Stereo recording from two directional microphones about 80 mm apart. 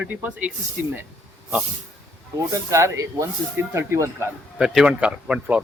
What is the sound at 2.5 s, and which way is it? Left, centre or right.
Speech, right.